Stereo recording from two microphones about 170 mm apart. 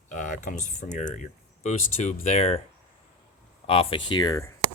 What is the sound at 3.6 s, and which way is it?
Speech, 35° left (ahead or behind).